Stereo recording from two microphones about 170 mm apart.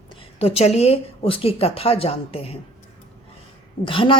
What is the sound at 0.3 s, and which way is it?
A woman's voice, 35° left (ahead or behind).